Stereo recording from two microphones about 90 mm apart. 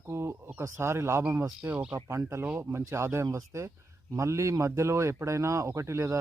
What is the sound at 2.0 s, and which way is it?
Speech, 30° right (ahead or behind).